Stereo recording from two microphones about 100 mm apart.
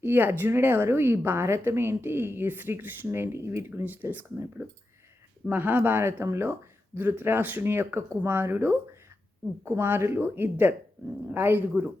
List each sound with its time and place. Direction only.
0.0 s a woman's voice: 20° right (ahead or behind)